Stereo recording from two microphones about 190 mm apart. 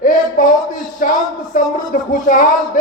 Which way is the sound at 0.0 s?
45° left (ahead or behind).